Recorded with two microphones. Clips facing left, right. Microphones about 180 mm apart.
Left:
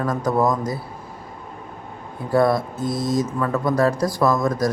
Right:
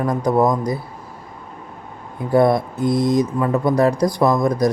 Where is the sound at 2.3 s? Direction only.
20° right (ahead or behind).